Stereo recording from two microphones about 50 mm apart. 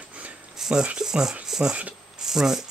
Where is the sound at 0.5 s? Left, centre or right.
Centre.